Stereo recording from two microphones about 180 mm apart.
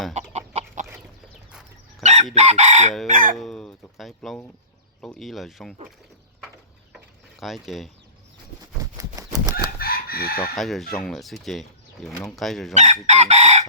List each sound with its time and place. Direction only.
0.1 s chicken: 40° right (ahead or behind)
2.3 s chicken: 35° right (ahead or behind)
3.3 s speech: centre (ahead or behind)
7.3 s speech: centre (ahead or behind)
9.0 s horse: 20° right (ahead or behind)
9.8 s chicken: 55° left (ahead or behind)
10.5 s speech: centre (ahead or behind)
12.7 s chicken: 40° right (ahead or behind)